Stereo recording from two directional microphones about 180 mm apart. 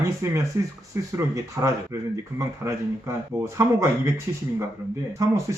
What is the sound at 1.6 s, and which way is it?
A man's voice, 15° right (ahead or behind).